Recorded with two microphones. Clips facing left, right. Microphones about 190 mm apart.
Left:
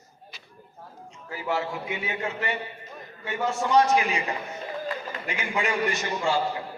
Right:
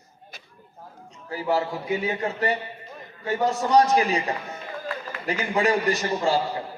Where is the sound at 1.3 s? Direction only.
35° right (ahead or behind).